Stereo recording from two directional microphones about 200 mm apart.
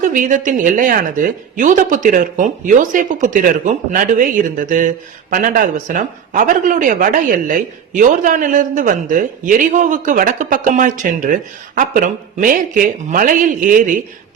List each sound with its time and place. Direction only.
0.0 s speech: 40° right (ahead or behind)